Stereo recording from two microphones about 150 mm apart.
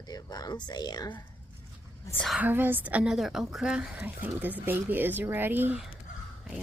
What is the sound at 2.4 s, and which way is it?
A woman's voice, 15° right (ahead or behind).